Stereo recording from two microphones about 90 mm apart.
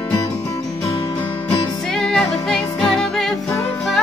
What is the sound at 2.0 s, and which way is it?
Music, 5° left (ahead or behind).